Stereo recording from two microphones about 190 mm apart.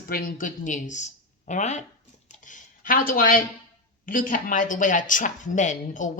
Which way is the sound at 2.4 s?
45° left (ahead or behind).